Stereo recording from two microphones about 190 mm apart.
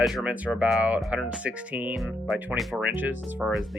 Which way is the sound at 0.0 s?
Centre (ahead or behind).